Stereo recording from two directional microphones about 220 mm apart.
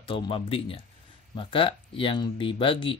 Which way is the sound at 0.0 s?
25° left (ahead or behind).